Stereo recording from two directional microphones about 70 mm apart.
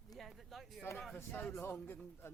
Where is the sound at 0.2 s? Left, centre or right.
Centre.